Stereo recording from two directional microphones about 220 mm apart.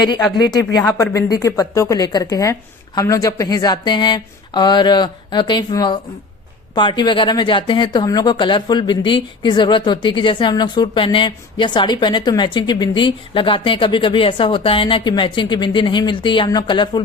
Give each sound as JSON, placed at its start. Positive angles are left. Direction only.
{"t": 0.0, "sound": "a woman's voice", "side_deg": 20}